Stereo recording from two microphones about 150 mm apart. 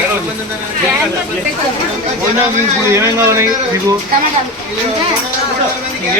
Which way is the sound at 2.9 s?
20° right (ahead or behind).